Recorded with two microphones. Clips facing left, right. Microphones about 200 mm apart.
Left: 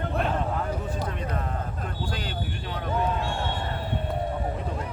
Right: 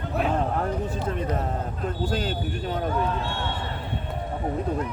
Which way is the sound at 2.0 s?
40° right (ahead or behind).